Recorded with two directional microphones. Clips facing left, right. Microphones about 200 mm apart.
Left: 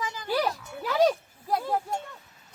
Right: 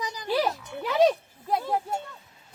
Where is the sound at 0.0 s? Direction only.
20° right (ahead or behind).